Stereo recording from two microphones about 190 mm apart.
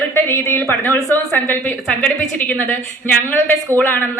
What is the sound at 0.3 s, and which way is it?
A woman's voice, 10° left (ahead or behind).